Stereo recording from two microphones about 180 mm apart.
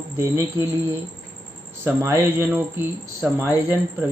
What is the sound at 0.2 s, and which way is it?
Speech, 15° right (ahead or behind).